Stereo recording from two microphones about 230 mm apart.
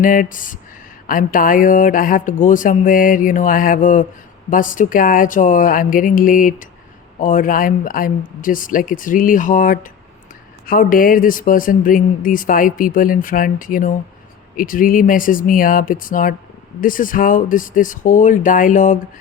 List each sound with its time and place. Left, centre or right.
0.0 s speech: left